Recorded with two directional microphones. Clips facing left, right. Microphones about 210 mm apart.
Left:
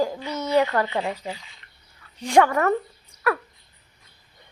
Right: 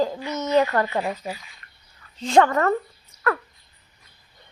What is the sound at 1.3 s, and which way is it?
Speech, 25° left (ahead or behind).